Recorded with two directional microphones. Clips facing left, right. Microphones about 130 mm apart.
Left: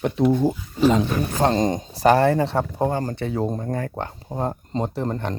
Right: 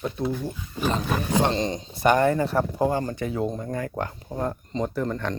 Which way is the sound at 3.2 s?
35° left (ahead or behind).